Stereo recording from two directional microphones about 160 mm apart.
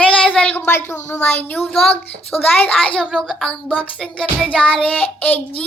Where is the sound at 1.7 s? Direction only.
5° left (ahead or behind).